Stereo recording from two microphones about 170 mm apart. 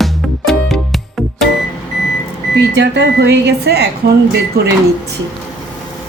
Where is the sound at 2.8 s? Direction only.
90° right; by 4.1 s 70° right (ahead or behind).